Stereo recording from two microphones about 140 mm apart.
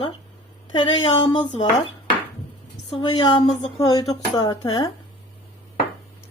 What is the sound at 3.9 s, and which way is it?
Speech, 30° left (ahead or behind).